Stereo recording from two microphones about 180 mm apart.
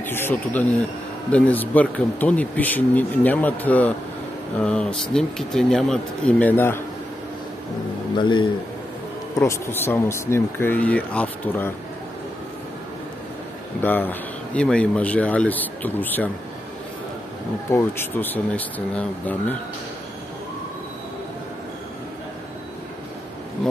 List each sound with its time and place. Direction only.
0.0 s speech: 10° left (ahead or behind)
8.2 s a man's voice: 25° left (ahead or behind)
9.4 s speech: 15° left (ahead or behind)
13.8 s speech: 10° left (ahead or behind)
17.6 s speech: 10° left (ahead or behind)